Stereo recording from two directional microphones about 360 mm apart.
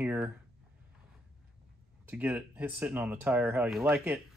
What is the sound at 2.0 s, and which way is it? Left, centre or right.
Speech, centre.